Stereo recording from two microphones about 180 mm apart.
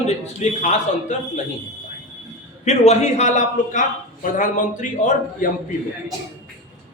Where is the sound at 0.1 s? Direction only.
40° left (ahead or behind).